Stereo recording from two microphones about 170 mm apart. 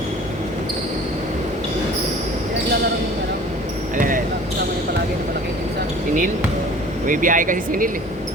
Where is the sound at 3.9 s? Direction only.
50° right (ahead or behind).